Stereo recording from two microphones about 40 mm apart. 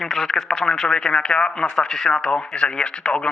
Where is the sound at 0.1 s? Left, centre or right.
Centre.